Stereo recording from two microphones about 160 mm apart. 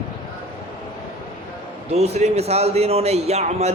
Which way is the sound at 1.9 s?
40° right (ahead or behind).